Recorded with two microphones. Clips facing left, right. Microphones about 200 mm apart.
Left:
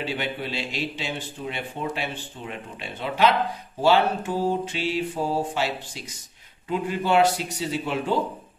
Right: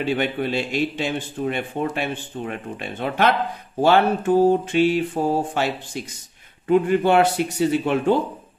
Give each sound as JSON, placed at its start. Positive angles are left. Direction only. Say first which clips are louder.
{"t": 0.0, "sound": "speech", "louder": "right 7 dB", "side_deg": -50}